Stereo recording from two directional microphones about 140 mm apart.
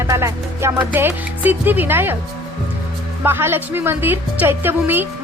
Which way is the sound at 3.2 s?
15° right (ahead or behind).